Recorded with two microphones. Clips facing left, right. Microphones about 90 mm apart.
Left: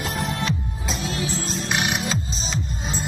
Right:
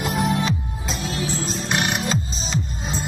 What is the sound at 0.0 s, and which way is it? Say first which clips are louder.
Music: right 4 dB; 5° right (ahead or behind).